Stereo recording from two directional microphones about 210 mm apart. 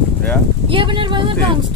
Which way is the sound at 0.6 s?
25° right (ahead or behind).